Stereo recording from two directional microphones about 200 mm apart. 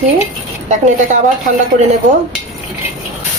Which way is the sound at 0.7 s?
40° right (ahead or behind).